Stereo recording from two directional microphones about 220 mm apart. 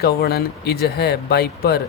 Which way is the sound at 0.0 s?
45° left (ahead or behind).